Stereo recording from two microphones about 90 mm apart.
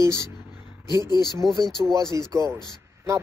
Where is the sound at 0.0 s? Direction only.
35° right (ahead or behind).